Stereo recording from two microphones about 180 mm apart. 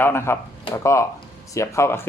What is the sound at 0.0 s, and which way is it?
Speech, 15° left (ahead or behind).